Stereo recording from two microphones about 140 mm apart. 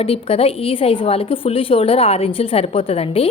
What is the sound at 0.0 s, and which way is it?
A woman's voice, 45° left (ahead or behind).